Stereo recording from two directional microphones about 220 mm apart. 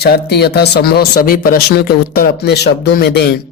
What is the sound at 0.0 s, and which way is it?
Speech, 45° left (ahead or behind).